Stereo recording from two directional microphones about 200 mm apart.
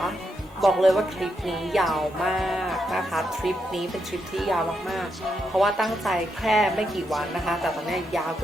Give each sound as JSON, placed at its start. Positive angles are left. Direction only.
{"t": 0.6, "sound": "speech", "side_deg": 0}